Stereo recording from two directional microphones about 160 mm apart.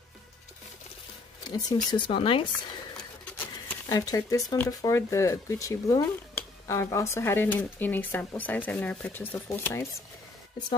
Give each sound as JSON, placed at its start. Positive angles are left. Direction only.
{"t": 1.5, "sound": "speech", "side_deg": 25}
{"t": 3.3, "sound": "a sound", "side_deg": 10}
{"t": 3.9, "sound": "speech", "side_deg": 25}